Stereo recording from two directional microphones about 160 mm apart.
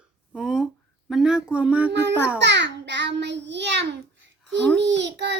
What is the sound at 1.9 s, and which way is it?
A child's voice, 90° right.